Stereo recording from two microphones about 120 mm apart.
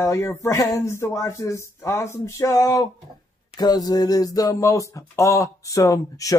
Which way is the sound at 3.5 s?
35° left (ahead or behind).